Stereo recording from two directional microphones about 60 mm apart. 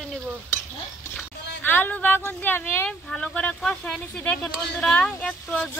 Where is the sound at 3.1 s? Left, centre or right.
Left.